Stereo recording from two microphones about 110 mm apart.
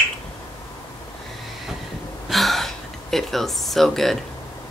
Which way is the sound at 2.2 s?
Centre (ahead or behind).